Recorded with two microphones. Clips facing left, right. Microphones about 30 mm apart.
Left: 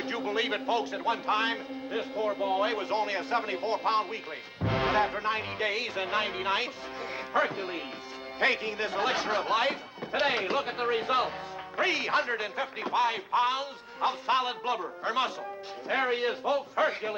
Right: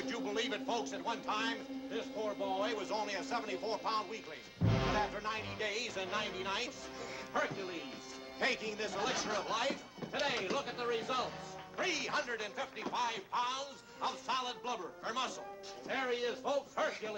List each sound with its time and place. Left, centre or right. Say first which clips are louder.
0.0 s speech: left 7 dB; left